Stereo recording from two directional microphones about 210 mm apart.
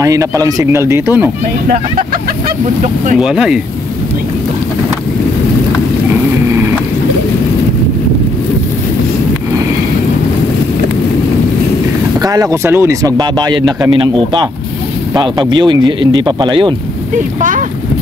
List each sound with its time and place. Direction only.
0.0 s speech: 15° right (ahead or behind)
3.2 s speech: 5° right (ahead or behind)
12.2 s speech: 15° right (ahead or behind)
17.4 s speech: 40° right (ahead or behind)